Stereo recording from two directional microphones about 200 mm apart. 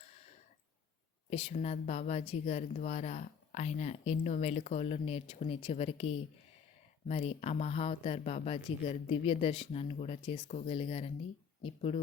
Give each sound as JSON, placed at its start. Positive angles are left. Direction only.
{"t": 1.3, "sound": "speech", "side_deg": 30}